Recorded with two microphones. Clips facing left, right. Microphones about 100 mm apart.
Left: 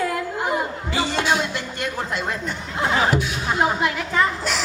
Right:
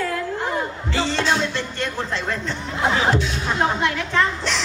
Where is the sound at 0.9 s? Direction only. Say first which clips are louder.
Even; 10° left (ahead or behind).